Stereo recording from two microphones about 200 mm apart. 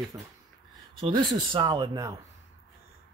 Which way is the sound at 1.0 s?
25° right (ahead or behind).